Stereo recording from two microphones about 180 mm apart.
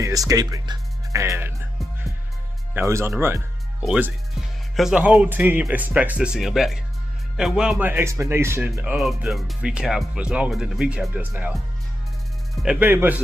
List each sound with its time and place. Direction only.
0.3 s speech: 20° right (ahead or behind)
2.7 s speech: 15° right (ahead or behind)
3.8 s speech: 5° right (ahead or behind)
8.9 s speech: centre (ahead or behind)